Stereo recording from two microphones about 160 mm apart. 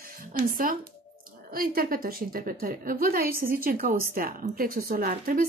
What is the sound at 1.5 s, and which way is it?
A woman's voice, 65° right (ahead or behind).